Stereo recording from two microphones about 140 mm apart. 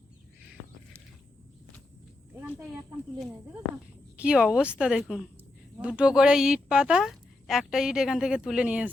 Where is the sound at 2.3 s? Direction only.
10° right (ahead or behind).